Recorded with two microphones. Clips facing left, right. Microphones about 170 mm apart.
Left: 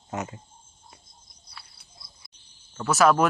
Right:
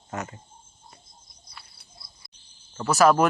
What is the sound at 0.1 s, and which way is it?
Speech, 15° left (ahead or behind).